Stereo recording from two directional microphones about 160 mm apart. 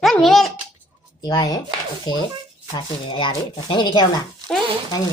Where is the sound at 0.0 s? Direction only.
Centre (ahead or behind).